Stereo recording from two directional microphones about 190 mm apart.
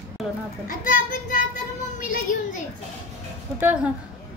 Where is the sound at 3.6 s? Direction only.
5° right (ahead or behind).